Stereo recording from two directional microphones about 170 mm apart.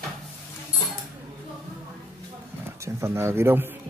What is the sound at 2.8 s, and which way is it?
Speech, 15° right (ahead or behind).